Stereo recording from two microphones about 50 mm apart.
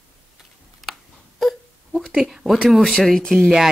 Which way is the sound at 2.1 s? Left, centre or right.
Centre.